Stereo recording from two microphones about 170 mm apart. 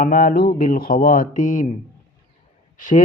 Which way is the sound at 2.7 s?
50° left (ahead or behind).